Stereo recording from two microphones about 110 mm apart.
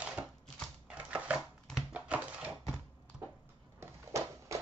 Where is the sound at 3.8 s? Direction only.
25° right (ahead or behind).